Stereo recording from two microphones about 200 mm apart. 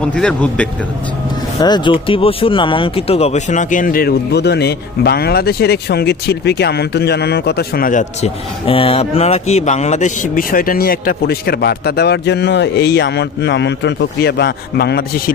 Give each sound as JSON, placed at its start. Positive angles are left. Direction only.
{"t": 0.0, "sound": "speech", "side_deg": 5}
{"t": 1.6, "sound": "speech", "side_deg": 20}
{"t": 8.6, "sound": "speech", "side_deg": 25}